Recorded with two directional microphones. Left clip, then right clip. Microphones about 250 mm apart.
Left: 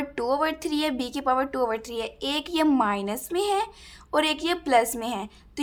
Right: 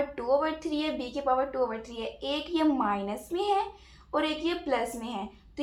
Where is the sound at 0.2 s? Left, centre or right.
Left.